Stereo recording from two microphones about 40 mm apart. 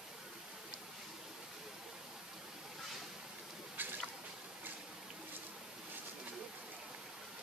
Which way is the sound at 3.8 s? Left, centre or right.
Right.